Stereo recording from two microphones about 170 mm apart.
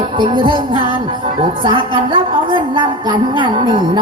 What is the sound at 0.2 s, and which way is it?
A woman's voice, 30° right (ahead or behind).